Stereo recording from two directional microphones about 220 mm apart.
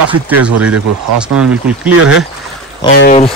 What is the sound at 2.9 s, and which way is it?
Speech, 45° left (ahead or behind).